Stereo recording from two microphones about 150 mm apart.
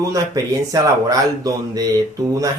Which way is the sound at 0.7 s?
25° right (ahead or behind).